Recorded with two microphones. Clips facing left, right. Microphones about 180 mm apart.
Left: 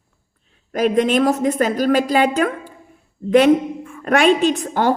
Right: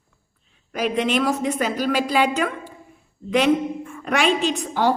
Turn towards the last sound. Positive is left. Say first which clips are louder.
# left 4 dB
turn(degrees=50)  # may be behind; listen again after turning